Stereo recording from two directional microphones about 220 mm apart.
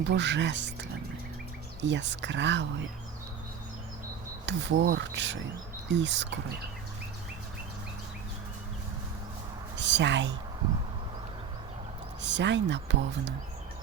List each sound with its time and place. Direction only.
0.1 s speech: 55° right (ahead or behind)
4.4 s speech: 50° right (ahead or behind)
9.7 s a sound: 55° right (ahead or behind)
12.2 s speech: 55° right (ahead or behind)